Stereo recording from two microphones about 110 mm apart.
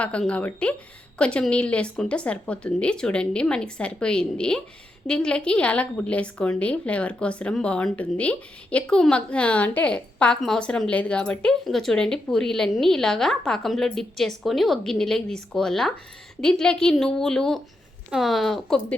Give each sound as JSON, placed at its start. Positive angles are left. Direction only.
{"t": 0.0, "sound": "a woman's voice", "side_deg": 10}